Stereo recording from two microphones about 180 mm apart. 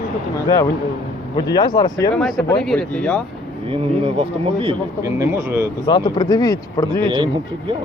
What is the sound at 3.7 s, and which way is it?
Speech, 30° right (ahead or behind).